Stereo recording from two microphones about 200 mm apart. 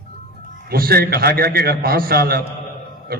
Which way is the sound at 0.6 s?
50° right (ahead or behind).